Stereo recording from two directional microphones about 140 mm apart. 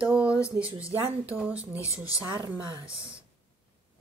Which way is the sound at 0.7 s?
40° right (ahead or behind).